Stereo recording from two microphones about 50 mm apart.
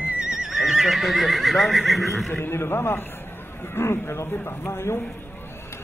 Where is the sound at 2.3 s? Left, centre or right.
Left.